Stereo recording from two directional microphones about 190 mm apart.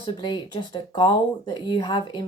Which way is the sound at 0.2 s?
25° left (ahead or behind).